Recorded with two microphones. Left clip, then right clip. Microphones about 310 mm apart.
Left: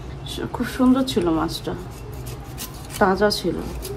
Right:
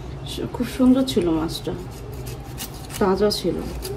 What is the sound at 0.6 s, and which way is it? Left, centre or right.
Speech, centre.